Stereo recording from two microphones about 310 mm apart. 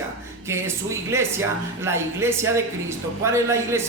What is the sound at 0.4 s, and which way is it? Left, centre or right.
Speech, centre.